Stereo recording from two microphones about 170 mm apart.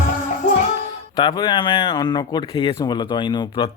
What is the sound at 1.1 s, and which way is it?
Speech, 25° left (ahead or behind).